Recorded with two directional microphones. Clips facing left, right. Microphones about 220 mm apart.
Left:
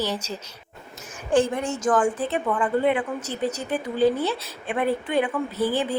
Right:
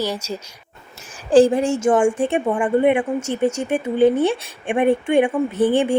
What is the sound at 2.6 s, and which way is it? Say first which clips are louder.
Speech: right 6 dB; 15° right (ahead or behind).